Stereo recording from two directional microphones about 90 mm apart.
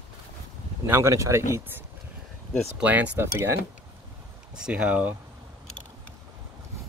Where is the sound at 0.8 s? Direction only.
30° right (ahead or behind).